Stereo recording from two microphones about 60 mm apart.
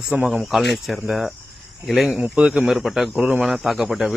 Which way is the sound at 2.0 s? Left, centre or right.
Centre.